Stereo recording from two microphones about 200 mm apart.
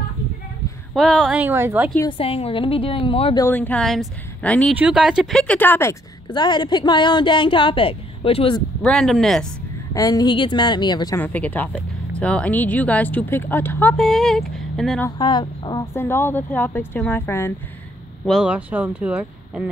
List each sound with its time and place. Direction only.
0.9 s a woman's voice: centre (ahead or behind)
2.0 s speech: 25° left (ahead or behind)
3.4 s speech: 10° left (ahead or behind)
4.7 s speech: 5° right (ahead or behind); by 8.6 s 25° left (ahead or behind)
8.8 s speech: centre (ahead or behind)
9.9 s speech: 20° left (ahead or behind)
11.1 s speech: 5° left (ahead or behind)
15.0 s speech: 20° left (ahead or behind)
18.2 s speech: centre (ahead or behind)